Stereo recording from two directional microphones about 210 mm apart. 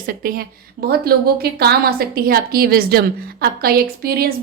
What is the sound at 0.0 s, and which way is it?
A woman's voice, 45° right (ahead or behind).